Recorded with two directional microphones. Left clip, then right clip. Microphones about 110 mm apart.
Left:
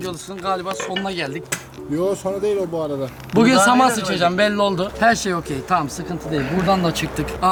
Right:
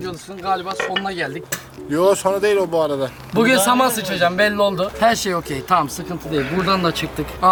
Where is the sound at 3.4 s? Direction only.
Centre (ahead or behind).